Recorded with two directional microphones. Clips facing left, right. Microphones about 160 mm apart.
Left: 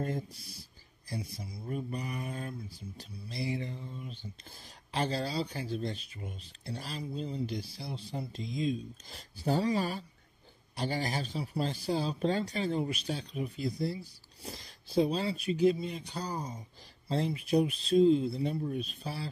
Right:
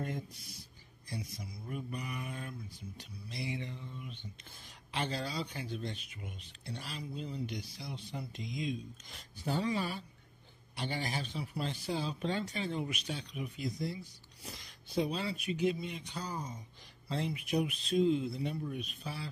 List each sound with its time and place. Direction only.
0.0 s speech: 35° left (ahead or behind)